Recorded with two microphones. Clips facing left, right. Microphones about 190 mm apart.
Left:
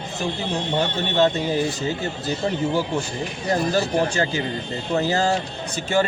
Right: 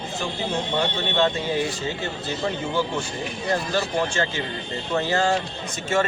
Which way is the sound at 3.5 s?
40° left (ahead or behind).